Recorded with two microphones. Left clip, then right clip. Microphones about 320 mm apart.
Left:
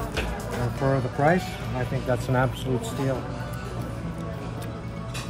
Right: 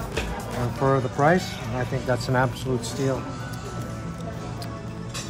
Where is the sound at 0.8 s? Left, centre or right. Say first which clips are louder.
Right 3 dB; centre.